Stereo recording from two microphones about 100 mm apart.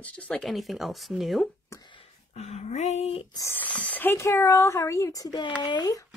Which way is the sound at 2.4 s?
90° left.